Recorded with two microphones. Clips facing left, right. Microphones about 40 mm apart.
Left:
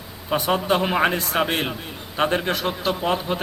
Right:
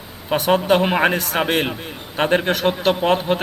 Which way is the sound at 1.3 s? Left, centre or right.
Centre.